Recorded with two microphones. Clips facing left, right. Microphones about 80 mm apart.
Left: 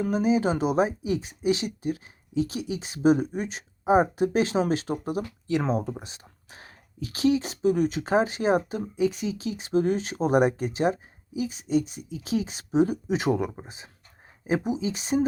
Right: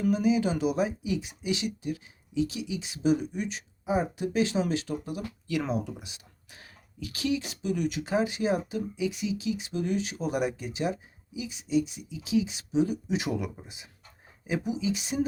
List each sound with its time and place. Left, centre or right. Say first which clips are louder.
0.0 s speech: left 2 dB; left